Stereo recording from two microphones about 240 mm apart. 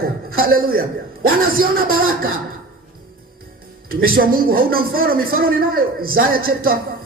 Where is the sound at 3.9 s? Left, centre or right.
Right.